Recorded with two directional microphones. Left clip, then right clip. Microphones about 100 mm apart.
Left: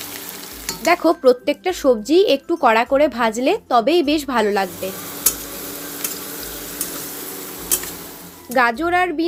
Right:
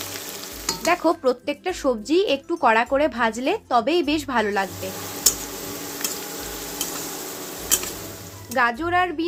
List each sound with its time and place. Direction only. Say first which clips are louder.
0.9 s a woman's voice: left 6 dB; 25° left (ahead or behind)
8.5 s a woman's voice: left 4 dB; 45° left (ahead or behind)